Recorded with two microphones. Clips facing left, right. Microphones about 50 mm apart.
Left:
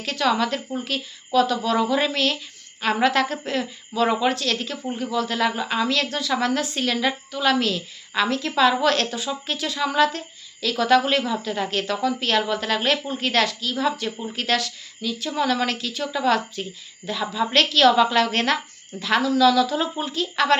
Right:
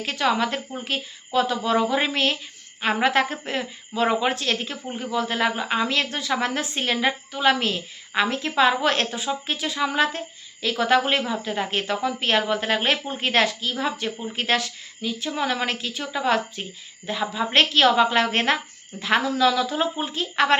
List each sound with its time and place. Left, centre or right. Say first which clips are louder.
0.0 s a woman's voice: left 1 dB; right